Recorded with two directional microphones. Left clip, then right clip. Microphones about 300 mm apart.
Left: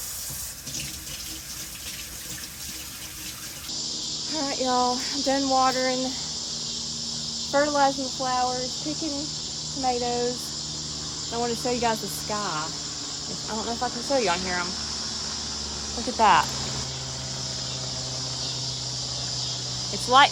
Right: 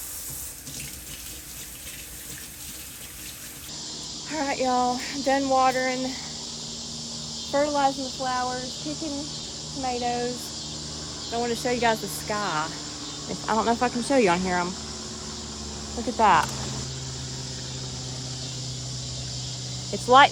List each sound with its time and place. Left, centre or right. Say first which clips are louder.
4.4 s speech: right 1 dB; centre
7.5 s speech: left 1 dB; centre
9.8 s speech: left 2 dB; centre
11.3 s speech: right 1 dB; centre
13.8 s speech: left 1 dB; right
16.0 s speech: even; centre
20.1 s speech: right 2 dB; centre